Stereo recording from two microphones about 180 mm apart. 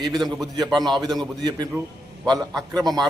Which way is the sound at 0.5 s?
Centre (ahead or behind).